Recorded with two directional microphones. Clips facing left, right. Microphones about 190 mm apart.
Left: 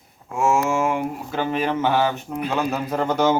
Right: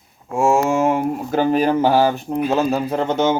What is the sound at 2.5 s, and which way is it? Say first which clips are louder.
Speech: right 1 dB; 30° right (ahead or behind).